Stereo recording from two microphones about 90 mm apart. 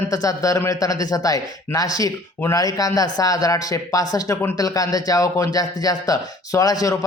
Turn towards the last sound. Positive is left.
turn(degrees=45)  # may be behind; listen again after turning